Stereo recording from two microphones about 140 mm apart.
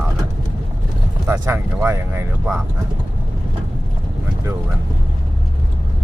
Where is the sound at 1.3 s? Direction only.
20° right (ahead or behind).